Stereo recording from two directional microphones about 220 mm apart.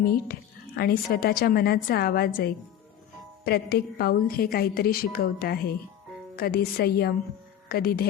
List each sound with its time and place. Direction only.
0.0 s a woman's voice: 45° left (ahead or behind)